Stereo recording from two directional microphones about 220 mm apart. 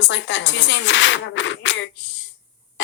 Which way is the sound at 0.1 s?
55° left (ahead or behind).